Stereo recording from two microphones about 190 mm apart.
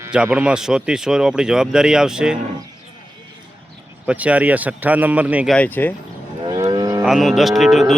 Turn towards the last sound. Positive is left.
turn(degrees=0)  # may be behind; listen again after turning